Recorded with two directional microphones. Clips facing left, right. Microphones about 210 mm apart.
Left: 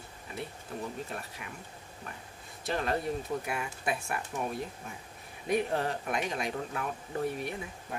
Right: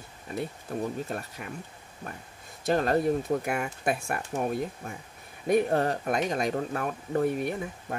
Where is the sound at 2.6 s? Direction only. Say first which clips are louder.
Right 7 dB; 45° right (ahead or behind).